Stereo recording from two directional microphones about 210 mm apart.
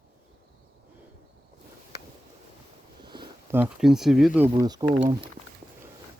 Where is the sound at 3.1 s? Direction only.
20° right (ahead or behind).